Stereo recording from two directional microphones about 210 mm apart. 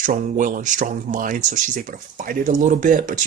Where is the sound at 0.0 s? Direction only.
40° right (ahead or behind).